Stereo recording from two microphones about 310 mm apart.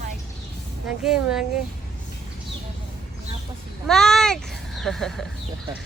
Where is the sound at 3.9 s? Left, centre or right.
Centre.